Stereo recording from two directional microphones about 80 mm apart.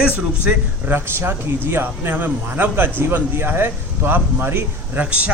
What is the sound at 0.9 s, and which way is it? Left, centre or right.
Speech, right.